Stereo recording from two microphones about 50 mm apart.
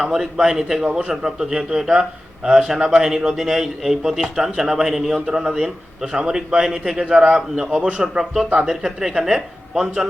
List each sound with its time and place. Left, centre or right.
0.0 s a man's voice: centre